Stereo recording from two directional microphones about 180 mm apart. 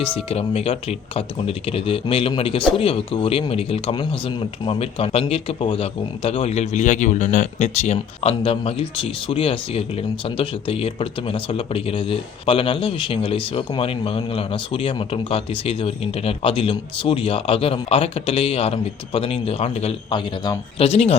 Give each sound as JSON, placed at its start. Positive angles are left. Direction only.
{"t": 0.3, "sound": "speech", "side_deg": 35}
{"t": 20.8, "sound": "speech", "side_deg": 35}